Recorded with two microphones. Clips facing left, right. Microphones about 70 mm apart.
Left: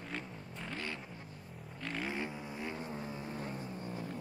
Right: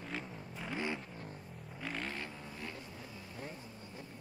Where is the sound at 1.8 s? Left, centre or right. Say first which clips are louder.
Left 2 dB; centre.